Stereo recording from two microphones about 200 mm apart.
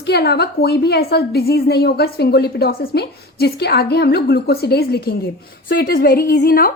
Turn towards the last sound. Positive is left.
turn(degrees=45)  # may be behind; listen again after turning